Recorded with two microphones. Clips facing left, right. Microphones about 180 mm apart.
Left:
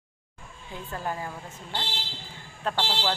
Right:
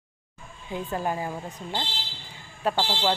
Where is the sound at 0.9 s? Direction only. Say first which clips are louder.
Right 4 dB; 15° right (ahead or behind).